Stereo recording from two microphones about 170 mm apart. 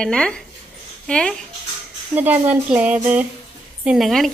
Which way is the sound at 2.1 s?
10° right (ahead or behind).